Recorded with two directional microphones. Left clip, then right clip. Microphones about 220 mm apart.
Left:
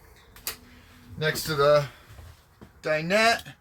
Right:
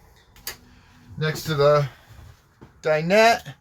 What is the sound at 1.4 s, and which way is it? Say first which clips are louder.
Speech: right 3 dB; 10° right (ahead or behind).